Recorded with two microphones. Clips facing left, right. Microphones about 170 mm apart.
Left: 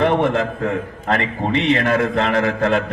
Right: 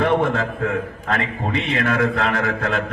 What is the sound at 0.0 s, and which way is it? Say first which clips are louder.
A man's voice: left 2 dB; 35° left (ahead or behind).